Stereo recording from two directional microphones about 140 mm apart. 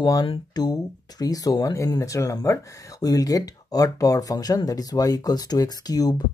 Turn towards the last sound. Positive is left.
turn(degrees=25)  # may be behind; listen again after turning